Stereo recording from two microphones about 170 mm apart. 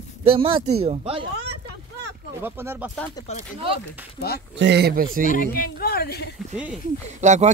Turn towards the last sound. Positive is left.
turn(degrees=-45)  # may be behind; listen again after turning